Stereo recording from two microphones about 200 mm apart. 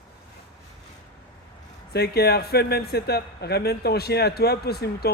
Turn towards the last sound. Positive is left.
turn(degrees=50)  # may be behind; listen again after turning